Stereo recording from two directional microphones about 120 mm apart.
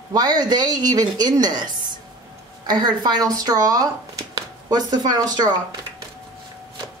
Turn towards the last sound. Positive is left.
turn(degrees=-35)  # may be behind; listen again after turning